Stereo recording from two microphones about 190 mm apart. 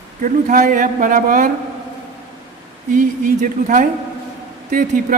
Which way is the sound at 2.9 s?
45° right (ahead or behind).